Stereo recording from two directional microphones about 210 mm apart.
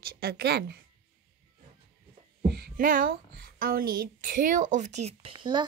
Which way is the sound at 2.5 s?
45° right (ahead or behind).